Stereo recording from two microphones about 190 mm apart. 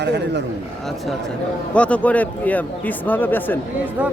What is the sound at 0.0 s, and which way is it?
Speech, 65° right (ahead or behind).